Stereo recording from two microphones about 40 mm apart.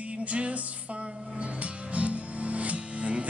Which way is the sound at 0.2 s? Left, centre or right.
Right.